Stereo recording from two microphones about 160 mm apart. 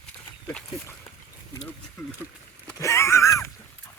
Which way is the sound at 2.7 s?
15° left (ahead or behind).